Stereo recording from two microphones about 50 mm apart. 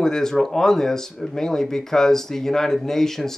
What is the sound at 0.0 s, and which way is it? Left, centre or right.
Speech, centre.